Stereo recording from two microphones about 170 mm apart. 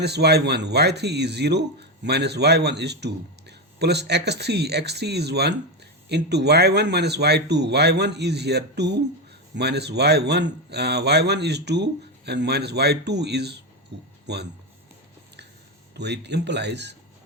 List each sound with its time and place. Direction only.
0.0 s speech: 75° right (ahead or behind)
16.0 s speech: 90° right